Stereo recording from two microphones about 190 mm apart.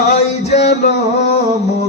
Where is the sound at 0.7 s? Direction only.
60° left (ahead or behind).